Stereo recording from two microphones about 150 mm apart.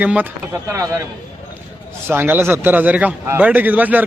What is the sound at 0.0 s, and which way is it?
Speech, 10° right (ahead or behind).